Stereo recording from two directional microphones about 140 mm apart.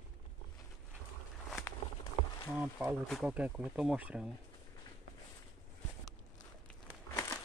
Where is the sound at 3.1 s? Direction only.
5° right (ahead or behind).